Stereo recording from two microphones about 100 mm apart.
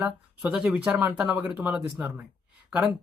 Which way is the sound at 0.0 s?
10° right (ahead or behind).